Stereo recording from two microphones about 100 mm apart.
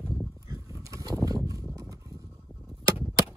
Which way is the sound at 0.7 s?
30° right (ahead or behind).